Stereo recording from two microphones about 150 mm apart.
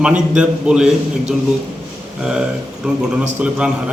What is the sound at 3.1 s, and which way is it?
Speech, 10° right (ahead or behind).